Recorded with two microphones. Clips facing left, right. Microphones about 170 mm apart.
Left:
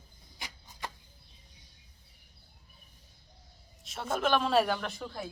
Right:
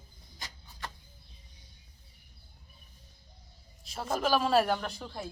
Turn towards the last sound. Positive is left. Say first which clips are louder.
# left 1 dB
turn(degrees=0)  # may be behind; listen again after turning